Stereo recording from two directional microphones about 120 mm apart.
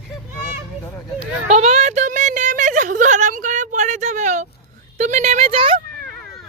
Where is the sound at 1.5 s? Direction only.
65° right (ahead or behind); by 4.5 s 90° right.